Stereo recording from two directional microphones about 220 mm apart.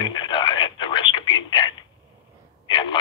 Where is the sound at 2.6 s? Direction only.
20° left (ahead or behind).